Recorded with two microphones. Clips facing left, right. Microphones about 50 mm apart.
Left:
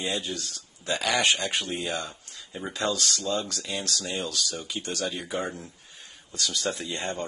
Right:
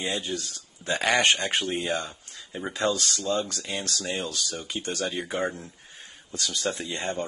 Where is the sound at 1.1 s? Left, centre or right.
Right; by 3.4 s centre.